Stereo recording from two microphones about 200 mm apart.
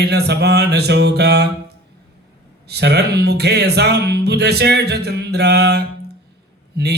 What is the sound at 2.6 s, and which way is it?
Music, 55° right (ahead or behind).